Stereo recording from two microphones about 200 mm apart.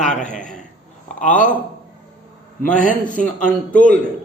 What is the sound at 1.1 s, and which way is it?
Speech, 40° left (ahead or behind).